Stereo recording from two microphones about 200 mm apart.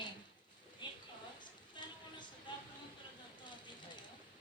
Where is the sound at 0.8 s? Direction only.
25° left (ahead or behind).